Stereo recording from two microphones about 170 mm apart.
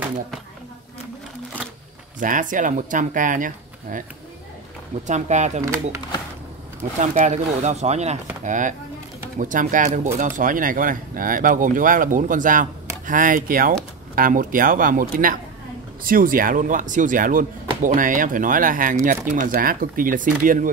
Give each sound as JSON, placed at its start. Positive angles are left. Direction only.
{"t": 2.1, "sound": "speech", "side_deg": -50}
{"t": 5.0, "sound": "speech", "side_deg": -45}
{"t": 7.0, "sound": "speech", "side_deg": -45}